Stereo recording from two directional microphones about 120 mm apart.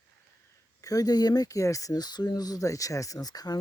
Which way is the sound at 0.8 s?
30° left (ahead or behind).